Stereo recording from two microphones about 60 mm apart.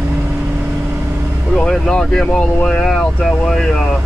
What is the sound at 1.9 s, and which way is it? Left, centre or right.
Speech, centre.